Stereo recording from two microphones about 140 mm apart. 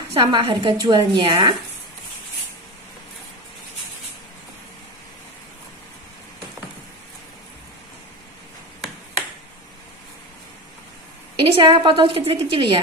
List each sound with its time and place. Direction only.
0.1 s a woman's voice: 35° right (ahead or behind)
11.3 s a woman's voice: 35° right (ahead or behind)